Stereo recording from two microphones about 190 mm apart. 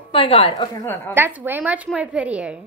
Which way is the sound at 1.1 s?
10° right (ahead or behind).